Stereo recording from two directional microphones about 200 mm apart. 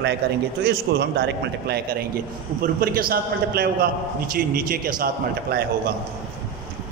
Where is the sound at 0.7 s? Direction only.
55° right (ahead or behind).